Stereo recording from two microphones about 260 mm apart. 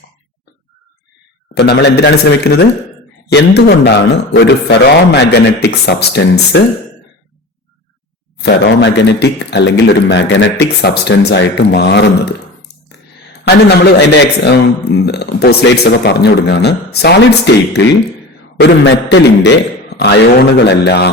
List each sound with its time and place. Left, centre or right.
1.5 s a man's voice: left
8.4 s a man's voice: left
13.4 s a man's voice: left